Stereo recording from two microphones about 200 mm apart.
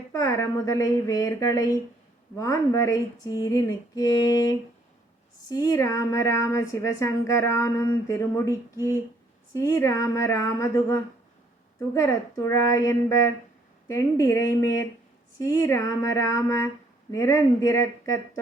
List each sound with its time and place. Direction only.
0.1 s speech: 15° left (ahead or behind)